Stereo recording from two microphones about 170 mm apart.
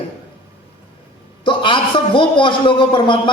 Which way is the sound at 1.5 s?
30° left (ahead or behind).